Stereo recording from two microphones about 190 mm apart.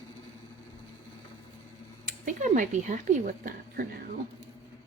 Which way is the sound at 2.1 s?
40° right (ahead or behind).